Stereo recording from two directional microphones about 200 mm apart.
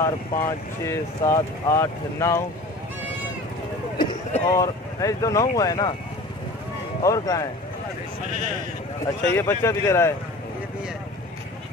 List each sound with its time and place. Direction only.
0.0 s speech: 15° left (ahead or behind)
4.0 s speech: 25° left (ahead or behind)
7.0 s speech: 15° left (ahead or behind)
9.0 s speech: 10° left (ahead or behind)